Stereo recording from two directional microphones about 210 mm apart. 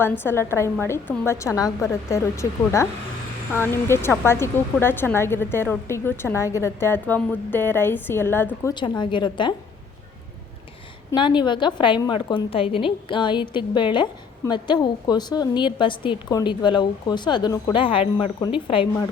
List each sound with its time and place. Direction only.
0.0 s speech: 10° left (ahead or behind)
8.7 s a woman's voice: 20° left (ahead or behind)
11.1 s a woman's voice: 20° left (ahead or behind)